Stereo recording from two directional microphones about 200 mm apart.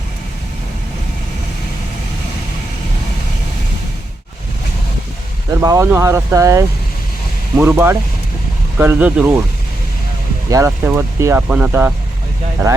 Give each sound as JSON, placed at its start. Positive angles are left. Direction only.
{"t": 5.5, "sound": "speech", "side_deg": -15}
{"t": 10.5, "sound": "speech", "side_deg": -15}